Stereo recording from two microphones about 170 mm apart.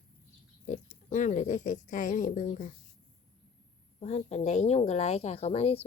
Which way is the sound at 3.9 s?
40° left (ahead or behind).